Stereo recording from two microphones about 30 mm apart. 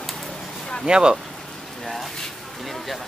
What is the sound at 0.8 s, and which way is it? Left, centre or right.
Speech, right.